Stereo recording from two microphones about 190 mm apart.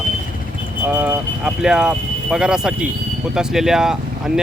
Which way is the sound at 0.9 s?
5° right (ahead or behind).